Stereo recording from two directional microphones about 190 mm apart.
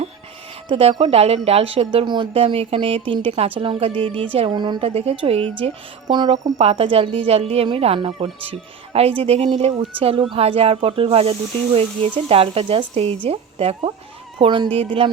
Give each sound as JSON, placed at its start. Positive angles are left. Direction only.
{"t": 0.7, "sound": "a woman's voice", "side_deg": -30}